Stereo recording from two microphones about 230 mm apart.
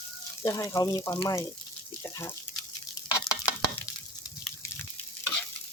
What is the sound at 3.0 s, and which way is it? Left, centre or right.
Stir, centre.